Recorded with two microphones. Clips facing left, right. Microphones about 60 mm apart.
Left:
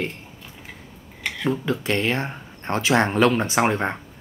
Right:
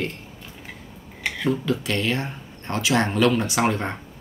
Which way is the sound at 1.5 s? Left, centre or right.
Left.